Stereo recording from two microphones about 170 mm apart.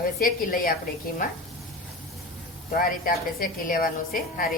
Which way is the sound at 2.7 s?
60° left (ahead or behind).